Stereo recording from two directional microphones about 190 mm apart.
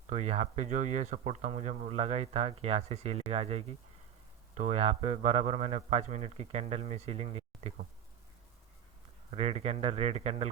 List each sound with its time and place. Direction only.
0.1 s speech: 35° right (ahead or behind)
9.3 s speech: 35° right (ahead or behind)